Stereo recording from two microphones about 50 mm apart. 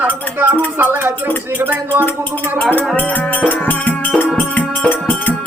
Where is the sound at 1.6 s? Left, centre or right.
Right.